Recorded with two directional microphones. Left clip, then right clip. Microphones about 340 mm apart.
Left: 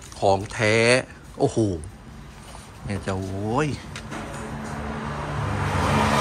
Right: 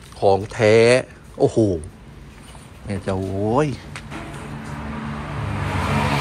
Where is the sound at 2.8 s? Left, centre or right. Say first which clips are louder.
Right 4 dB; centre.